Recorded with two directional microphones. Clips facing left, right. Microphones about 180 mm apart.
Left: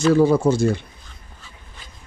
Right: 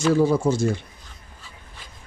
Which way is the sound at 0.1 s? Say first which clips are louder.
Left 3 dB; 65° left (ahead or behind).